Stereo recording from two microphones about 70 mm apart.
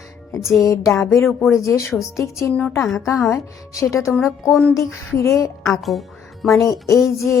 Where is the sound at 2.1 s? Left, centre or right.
Left.